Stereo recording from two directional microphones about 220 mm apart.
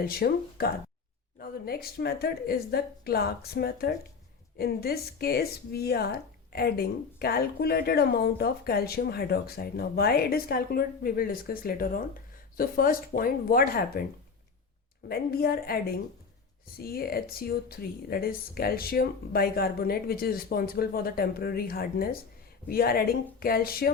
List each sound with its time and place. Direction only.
0.0 s speech: 45° left (ahead or behind)
15.1 s speech: 45° left (ahead or behind)